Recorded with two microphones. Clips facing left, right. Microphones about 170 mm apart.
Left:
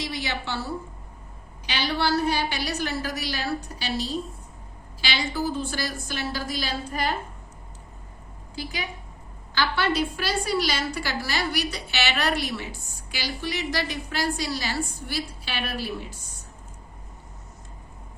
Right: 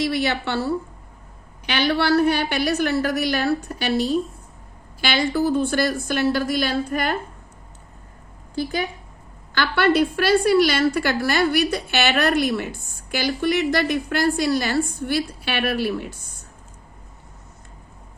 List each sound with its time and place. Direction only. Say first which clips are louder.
0.0 s a woman's voice: right 9 dB; 55° right (ahead or behind)
9.6 s a woman's voice: right 6 dB; 60° right (ahead or behind)